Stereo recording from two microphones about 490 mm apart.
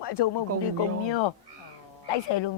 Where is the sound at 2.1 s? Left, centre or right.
Left.